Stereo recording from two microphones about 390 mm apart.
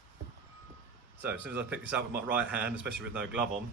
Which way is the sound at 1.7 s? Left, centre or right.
Centre.